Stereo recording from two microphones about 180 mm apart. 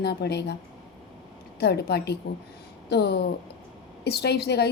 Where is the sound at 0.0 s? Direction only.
65° left (ahead or behind).